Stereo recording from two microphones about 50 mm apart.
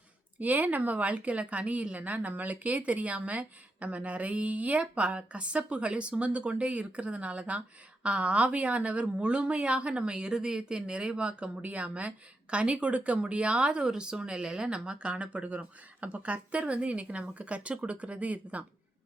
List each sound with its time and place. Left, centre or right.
0.3 s speech: right